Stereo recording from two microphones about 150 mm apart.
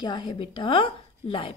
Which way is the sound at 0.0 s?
30° left (ahead or behind).